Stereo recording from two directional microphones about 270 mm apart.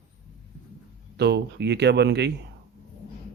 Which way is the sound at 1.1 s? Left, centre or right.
Right.